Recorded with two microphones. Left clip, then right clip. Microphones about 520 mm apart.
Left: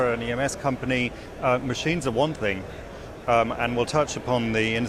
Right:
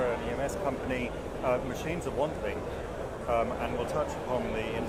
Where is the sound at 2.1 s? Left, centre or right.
Left.